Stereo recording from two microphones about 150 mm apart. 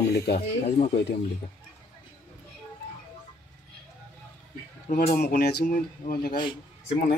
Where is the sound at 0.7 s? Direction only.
45° left (ahead or behind).